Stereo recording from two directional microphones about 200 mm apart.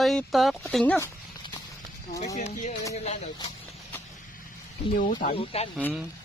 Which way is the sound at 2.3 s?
35° left (ahead or behind).